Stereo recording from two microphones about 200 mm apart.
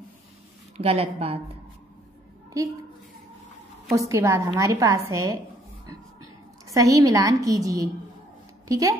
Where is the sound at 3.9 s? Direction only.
15° right (ahead or behind).